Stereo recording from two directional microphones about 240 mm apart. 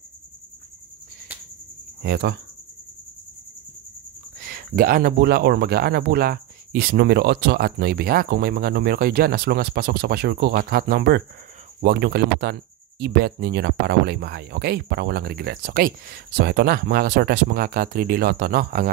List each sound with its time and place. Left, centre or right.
2.0 s speech: right
4.4 s speech: right